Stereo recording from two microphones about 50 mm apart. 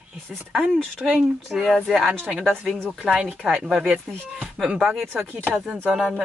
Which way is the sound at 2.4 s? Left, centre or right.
Right.